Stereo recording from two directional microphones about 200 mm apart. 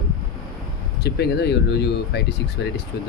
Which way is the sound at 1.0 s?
55° left (ahead or behind).